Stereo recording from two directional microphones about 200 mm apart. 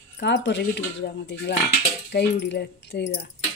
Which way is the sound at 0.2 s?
60° left (ahead or behind).